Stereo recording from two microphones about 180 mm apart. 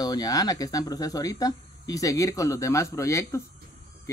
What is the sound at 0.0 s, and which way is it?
Speech, 20° left (ahead or behind).